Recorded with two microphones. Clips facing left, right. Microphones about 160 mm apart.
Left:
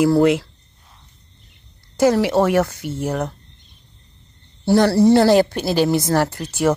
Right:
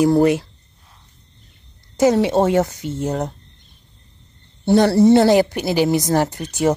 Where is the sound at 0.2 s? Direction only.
90° left.